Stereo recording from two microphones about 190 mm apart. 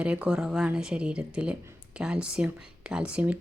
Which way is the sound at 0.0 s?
5° right (ahead or behind).